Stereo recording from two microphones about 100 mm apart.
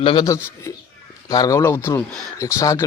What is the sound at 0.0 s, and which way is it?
Speech, 55° left (ahead or behind).